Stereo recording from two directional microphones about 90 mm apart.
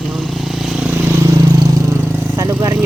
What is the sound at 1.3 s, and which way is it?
Vehicle, 45° right (ahead or behind).